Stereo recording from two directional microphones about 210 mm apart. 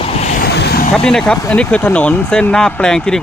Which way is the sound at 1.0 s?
5° left (ahead or behind).